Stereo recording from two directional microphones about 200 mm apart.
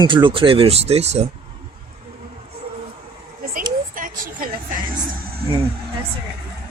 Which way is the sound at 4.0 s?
45° right (ahead or behind).